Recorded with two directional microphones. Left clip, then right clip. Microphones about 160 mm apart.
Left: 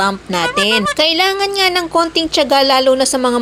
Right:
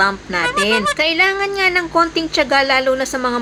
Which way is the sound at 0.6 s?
Centre (ahead or behind).